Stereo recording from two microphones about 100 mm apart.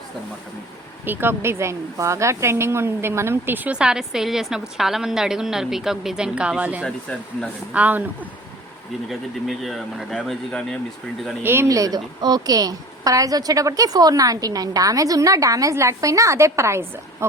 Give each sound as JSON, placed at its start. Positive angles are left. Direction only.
{"t": 1.0, "sound": "speech", "side_deg": -20}
{"t": 6.8, "sound": "speech", "side_deg": 10}
{"t": 7.7, "sound": "speech", "side_deg": -15}
{"t": 9.0, "sound": "speech", "side_deg": 0}
{"t": 11.4, "sound": "speech", "side_deg": -25}
{"t": 11.7, "sound": "a woman's voice", "side_deg": -40}